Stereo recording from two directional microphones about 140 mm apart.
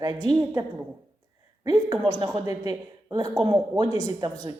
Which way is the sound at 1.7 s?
30° right (ahead or behind).